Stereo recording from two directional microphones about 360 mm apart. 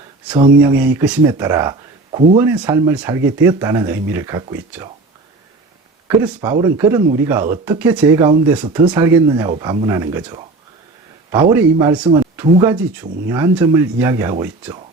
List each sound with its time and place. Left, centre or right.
0.9 s speech: centre
6.1 s speech: centre